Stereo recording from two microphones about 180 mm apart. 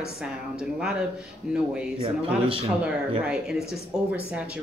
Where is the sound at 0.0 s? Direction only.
5° right (ahead or behind).